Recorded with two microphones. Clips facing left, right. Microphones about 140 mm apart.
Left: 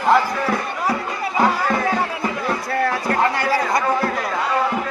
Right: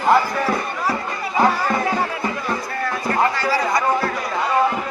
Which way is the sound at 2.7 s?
65° left (ahead or behind).